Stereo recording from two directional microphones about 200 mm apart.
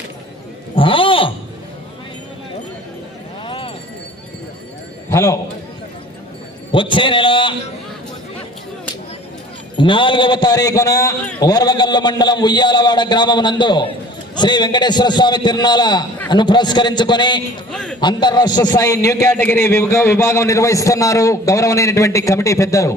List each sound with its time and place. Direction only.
0.8 s a sound: 25° left (ahead or behind)
3.4 s clip-clop: 25° left (ahead or behind)
5.1 s a man's voice: 15° left (ahead or behind)
6.7 s a man's voice: 25° left (ahead or behind)
9.7 s a man's voice: 25° left (ahead or behind)
17.7 s speech: 5° left (ahead or behind)
18.0 s a man's voice: 20° left (ahead or behind)